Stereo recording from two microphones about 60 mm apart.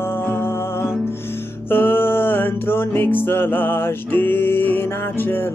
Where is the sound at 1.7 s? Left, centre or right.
Left.